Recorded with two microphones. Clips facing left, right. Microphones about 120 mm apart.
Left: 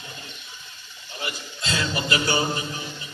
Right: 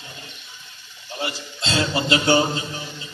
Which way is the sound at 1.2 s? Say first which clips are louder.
Right 4 dB; 25° right (ahead or behind).